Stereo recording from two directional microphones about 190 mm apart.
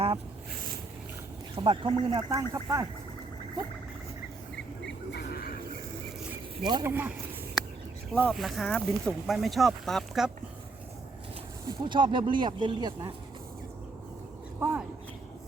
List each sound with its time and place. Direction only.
1.5 s speech: 30° right (ahead or behind)
4.9 s a sound: 55° left (ahead or behind)
6.6 s speech: 25° right (ahead or behind)
6.8 s speech: 10° right (ahead or behind)
8.1 s speech: 5° left (ahead or behind)
11.6 s speech: 25° right (ahead or behind)
14.6 s speech: 10° right (ahead or behind)